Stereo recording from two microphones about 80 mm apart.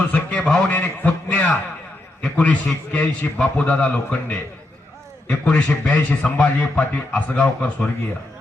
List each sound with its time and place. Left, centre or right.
0.1 s a man's voice: centre